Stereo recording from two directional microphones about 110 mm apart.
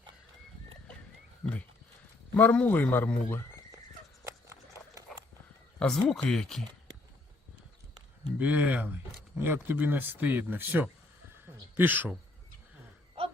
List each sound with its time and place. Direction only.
2.3 s a man's voice: 15° left (ahead or behind)
4.2 s horse: 25° right (ahead or behind)
5.8 s speech: 5° left (ahead or behind)
8.4 s speech: 10° right (ahead or behind)
11.4 s a sound: 20° right (ahead or behind)